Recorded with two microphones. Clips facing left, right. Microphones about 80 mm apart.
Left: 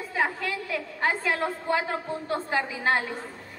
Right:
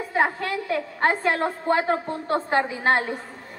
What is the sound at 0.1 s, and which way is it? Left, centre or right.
A woman's voice, right.